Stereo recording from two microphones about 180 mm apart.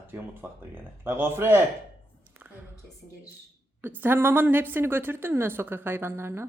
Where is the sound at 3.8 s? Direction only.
10° right (ahead or behind).